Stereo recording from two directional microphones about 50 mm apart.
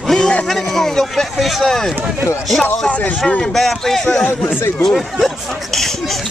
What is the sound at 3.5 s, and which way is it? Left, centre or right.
Speech, centre.